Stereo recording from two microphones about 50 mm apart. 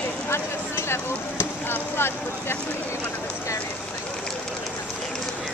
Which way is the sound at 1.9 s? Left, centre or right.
Left.